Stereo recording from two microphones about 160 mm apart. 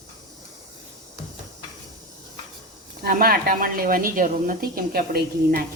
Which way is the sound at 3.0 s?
70° right (ahead or behind).